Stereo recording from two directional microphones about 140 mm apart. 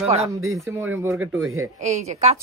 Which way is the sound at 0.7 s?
15° right (ahead or behind).